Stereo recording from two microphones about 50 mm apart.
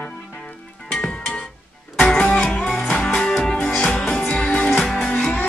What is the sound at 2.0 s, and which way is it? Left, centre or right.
Music, centre.